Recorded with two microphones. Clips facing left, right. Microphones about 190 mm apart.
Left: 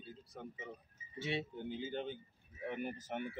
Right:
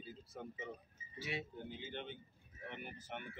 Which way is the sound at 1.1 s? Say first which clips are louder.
Left 5 dB; 30° left (ahead or behind).